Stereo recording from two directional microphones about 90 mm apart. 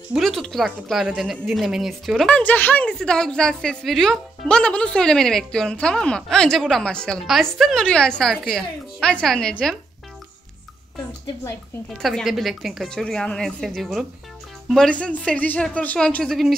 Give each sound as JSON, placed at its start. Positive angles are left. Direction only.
{"t": 0.1, "sound": "a woman's voice", "side_deg": 0}
{"t": 2.2, "sound": "speech", "side_deg": 15}
{"t": 3.0, "sound": "speech", "side_deg": 5}
{"t": 11.9, "sound": "a woman's voice", "side_deg": 5}
{"t": 16.3, "sound": "a woman's voice", "side_deg": 0}